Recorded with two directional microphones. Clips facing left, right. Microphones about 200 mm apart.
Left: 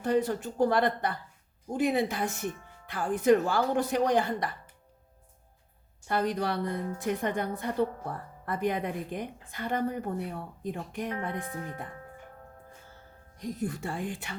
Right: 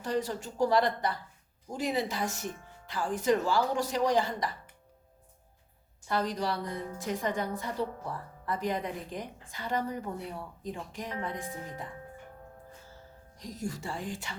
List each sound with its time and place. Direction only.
0.0 s a woman's voice: 55° left (ahead or behind)
6.1 s a woman's voice: 55° left (ahead or behind)
13.4 s a woman's voice: 60° left (ahead or behind)